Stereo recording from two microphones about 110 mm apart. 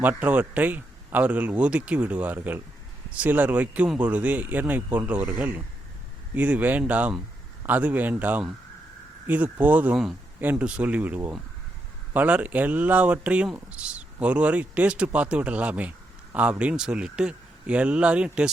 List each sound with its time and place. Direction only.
0.0 s speech: 15° right (ahead or behind)